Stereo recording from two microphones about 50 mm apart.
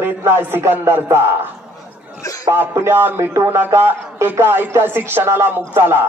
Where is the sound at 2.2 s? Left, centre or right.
Left.